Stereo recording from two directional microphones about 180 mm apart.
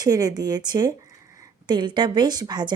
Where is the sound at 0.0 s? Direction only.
20° right (ahead or behind).